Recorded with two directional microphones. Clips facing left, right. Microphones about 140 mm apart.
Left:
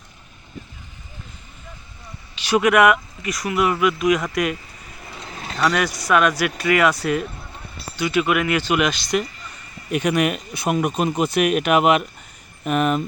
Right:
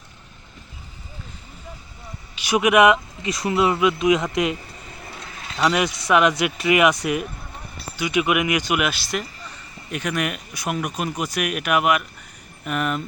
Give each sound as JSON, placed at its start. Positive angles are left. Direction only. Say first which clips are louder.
{"t": 2.3, "sound": "speech", "louder": "left 1 dB", "side_deg": -10}
{"t": 5.5, "sound": "speech", "louder": "even", "side_deg": -20}
{"t": 9.9, "sound": "speech", "louder": "left 6 dB", "side_deg": 20}